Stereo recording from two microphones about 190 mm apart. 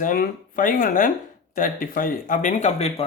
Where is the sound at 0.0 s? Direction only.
45° left (ahead or behind).